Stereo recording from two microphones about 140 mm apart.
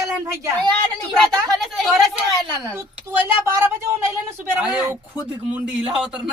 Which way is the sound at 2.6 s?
20° right (ahead or behind).